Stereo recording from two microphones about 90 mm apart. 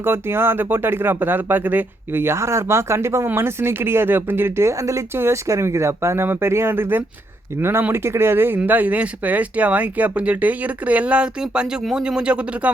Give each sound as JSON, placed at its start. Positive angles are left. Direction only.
{"t": 0.0, "sound": "speech", "side_deg": -25}